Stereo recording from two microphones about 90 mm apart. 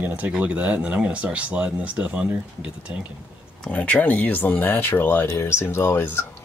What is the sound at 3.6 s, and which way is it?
Speech, 15° left (ahead or behind).